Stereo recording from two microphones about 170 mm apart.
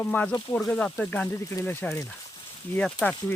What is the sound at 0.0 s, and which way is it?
Speech, 10° left (ahead or behind).